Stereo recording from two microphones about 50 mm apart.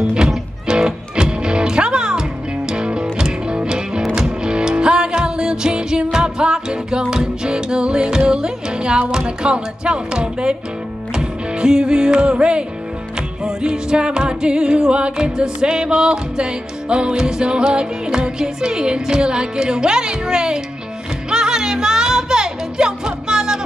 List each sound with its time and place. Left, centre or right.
0.7 s music: centre